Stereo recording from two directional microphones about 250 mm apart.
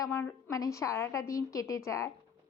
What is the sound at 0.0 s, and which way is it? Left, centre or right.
A woman's voice, centre.